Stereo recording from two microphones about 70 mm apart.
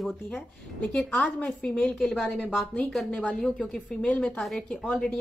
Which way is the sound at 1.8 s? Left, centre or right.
Centre.